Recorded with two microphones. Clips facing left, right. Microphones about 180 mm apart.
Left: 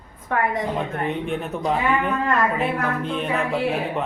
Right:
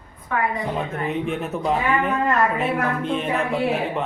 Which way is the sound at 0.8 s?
Centre (ahead or behind).